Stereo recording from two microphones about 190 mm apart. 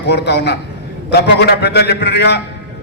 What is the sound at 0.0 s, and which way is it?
A man's voice, 60° left (ahead or behind).